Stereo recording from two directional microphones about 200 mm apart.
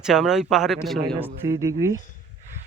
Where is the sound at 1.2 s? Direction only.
15° right (ahead or behind).